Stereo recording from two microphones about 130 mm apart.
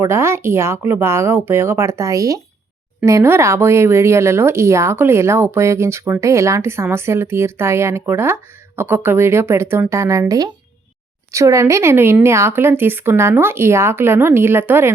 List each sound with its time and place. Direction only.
0.0 s speech: 20° right (ahead or behind)